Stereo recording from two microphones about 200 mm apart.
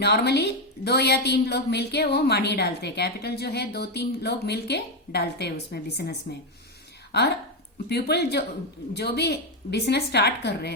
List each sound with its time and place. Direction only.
0.0 s a woman's voice: 55° left (ahead or behind)
7.9 s a woman's voice: 55° left (ahead or behind)